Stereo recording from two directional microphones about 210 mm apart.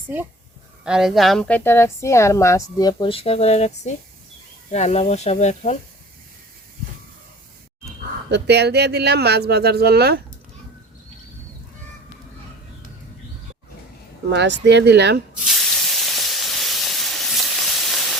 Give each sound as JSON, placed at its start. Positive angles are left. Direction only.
{"t": 0.9, "sound": "a woman's voice", "side_deg": 0}
{"t": 8.3, "sound": "speech", "side_deg": -50}
{"t": 14.3, "sound": "speech", "side_deg": -55}
{"t": 15.4, "sound": "hiss", "side_deg": 0}